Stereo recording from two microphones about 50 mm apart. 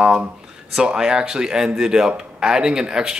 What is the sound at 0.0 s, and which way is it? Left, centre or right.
Speech, right.